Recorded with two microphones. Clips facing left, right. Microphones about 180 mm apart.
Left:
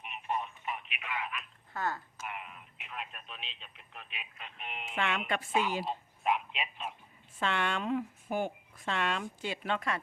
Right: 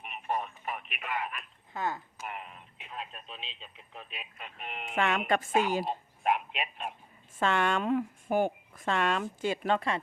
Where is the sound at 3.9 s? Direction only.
40° right (ahead or behind).